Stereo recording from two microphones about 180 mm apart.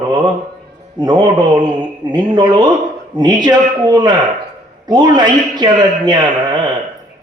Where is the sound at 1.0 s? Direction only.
25° right (ahead or behind).